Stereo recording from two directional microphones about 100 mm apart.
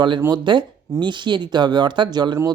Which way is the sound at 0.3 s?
50° right (ahead or behind).